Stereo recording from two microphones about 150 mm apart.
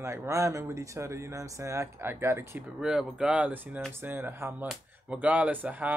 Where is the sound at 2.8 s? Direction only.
5° right (ahead or behind).